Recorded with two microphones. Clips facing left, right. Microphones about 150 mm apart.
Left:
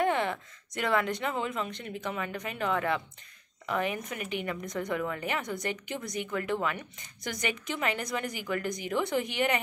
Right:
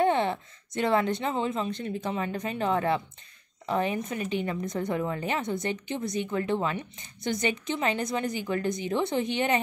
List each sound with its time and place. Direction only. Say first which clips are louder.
0.0 s a woman's voice: right 4 dB; 30° right (ahead or behind)